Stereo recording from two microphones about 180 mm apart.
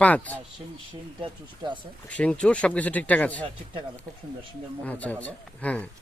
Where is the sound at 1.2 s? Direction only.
25° right (ahead or behind).